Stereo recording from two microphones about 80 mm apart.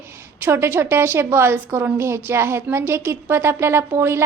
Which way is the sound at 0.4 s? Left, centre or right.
Right.